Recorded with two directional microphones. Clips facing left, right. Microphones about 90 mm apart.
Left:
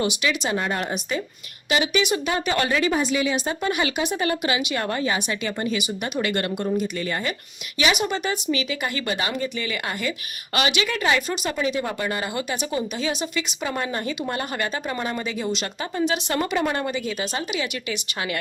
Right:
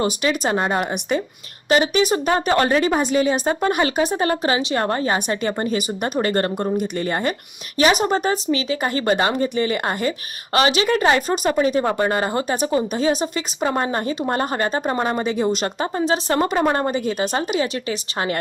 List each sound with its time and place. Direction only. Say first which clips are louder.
0.0 s speech: right 4 dB; 40° right (ahead or behind)